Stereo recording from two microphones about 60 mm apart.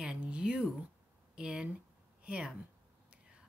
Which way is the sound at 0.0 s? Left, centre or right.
Centre.